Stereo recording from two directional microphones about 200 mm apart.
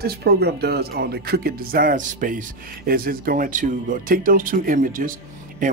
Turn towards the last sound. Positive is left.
turn(degrees=-45)  # may be behind; listen again after turning